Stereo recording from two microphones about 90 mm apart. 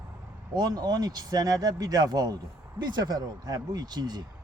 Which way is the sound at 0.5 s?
45° right (ahead or behind).